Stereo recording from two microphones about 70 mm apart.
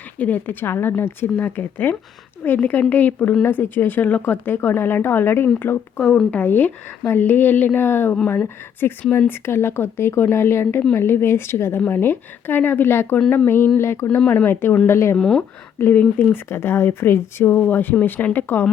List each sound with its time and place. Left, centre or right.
0.2 s a woman's voice: left
6.0 s a woman's voice: centre; by 14.2 s left
14.3 s a woman's voice: left
15.2 s speech: centre
15.8 s a woman's voice: left